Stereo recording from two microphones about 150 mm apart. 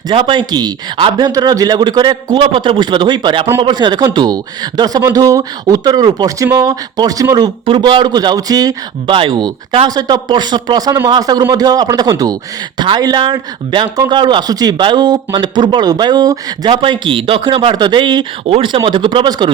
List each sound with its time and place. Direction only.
0.1 s speech: 35° right (ahead or behind)
9.1 s speech: 35° right (ahead or behind)